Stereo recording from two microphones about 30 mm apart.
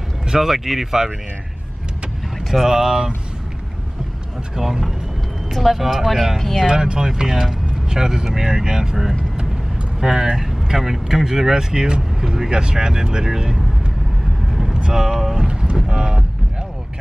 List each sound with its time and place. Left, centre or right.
0.4 s speech: centre
2.6 s speech: centre
4.6 s speech: centre
5.5 s speech: centre
6.6 s speech: right
9.9 s speech: right
10.3 s speech: centre
14.5 s vehicle: centre
15.0 s speech: centre